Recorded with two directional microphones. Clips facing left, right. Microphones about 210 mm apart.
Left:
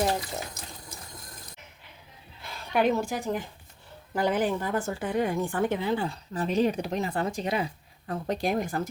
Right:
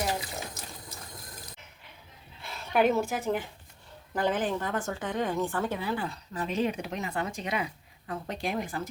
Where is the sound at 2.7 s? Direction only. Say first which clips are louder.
Even; 5° right (ahead or behind).